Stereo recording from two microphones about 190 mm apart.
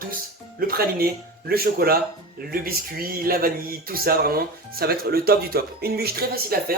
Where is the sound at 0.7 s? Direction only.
50° right (ahead or behind).